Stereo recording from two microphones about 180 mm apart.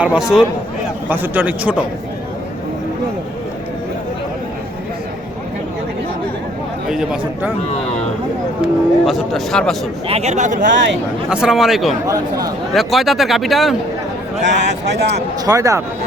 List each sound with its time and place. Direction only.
0.0 s a man's voice: 5° right (ahead or behind)
6.8 s speech: 5° right (ahead or behind)
8.6 s speech: centre (ahead or behind)
10.1 s speech: 35° right (ahead or behind)
10.7 s speech: 85° right
11.3 s speech: 5° right (ahead or behind)
14.4 s speech: 80° right
15.4 s a man's voice: 20° right (ahead or behind)